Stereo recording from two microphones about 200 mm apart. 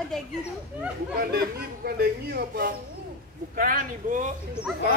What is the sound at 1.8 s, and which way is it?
Speech, 50° right (ahead or behind).